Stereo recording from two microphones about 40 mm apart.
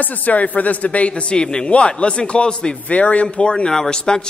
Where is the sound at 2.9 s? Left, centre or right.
Left.